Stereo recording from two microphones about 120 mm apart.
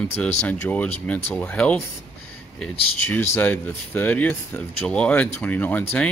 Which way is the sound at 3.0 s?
15° left (ahead or behind).